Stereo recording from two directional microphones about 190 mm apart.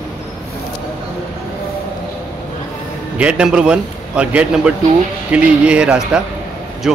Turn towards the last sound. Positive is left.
turn(degrees=-5)  # may be behind; listen again after turning